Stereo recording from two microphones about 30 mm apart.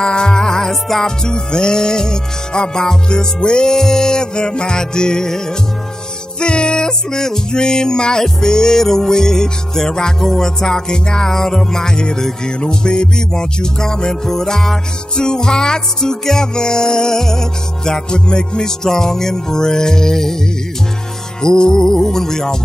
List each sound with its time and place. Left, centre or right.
0.0 s music: left
0.7 s music: centre
1.0 s music: left
3.7 s music: centre
6.4 s music: left
21.4 s music: left